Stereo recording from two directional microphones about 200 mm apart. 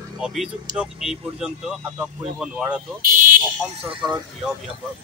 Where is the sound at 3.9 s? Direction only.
25° right (ahead or behind).